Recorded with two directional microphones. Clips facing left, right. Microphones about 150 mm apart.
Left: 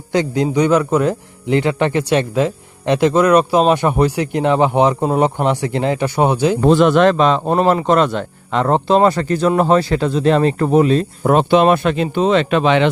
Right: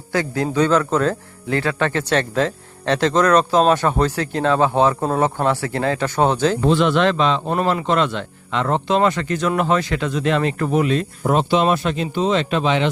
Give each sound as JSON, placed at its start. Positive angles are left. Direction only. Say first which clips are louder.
{"t": 0.1, "sound": "a man's voice", "louder": "left 4 dB", "side_deg": 20}
{"t": 6.6, "sound": "a man's voice", "louder": "left 8 dB", "side_deg": 45}
{"t": 11.2, "sound": "speech", "louder": "left 5 dB", "side_deg": 60}